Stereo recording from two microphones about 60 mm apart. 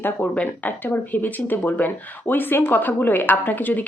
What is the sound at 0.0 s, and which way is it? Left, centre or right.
Speech, left.